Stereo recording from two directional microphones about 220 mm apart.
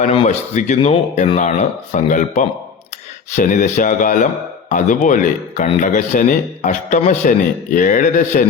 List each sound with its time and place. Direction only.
0.0 s a man's voice: 30° left (ahead or behind)